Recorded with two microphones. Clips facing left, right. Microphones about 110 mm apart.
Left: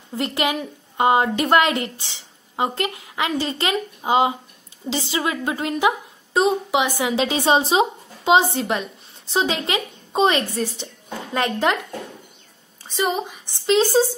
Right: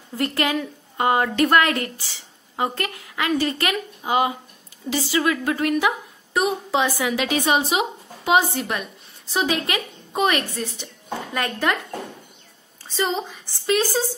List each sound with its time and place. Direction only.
0.1 s a woman's voice: 20° left (ahead or behind)
12.8 s a woman's voice: 15° left (ahead or behind)